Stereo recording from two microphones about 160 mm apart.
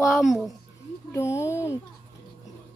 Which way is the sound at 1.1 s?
20° left (ahead or behind).